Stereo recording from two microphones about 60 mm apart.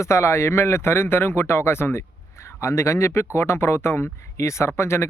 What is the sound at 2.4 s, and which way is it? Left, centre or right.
Speech, left.